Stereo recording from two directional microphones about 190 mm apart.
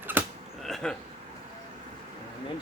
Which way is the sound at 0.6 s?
Centre (ahead or behind).